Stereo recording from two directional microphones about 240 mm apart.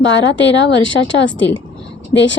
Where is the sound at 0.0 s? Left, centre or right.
Left.